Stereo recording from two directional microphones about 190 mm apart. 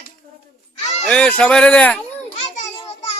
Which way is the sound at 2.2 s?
40° left (ahead or behind).